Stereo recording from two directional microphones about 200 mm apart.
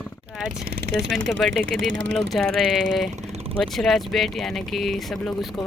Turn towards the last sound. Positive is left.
turn(degrees=0)  # may be behind; listen again after turning